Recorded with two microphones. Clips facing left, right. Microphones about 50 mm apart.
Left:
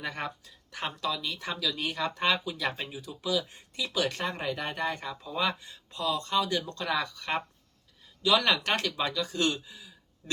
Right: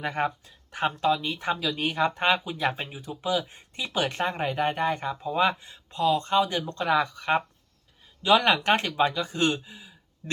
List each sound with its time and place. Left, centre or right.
0.0 s speech: right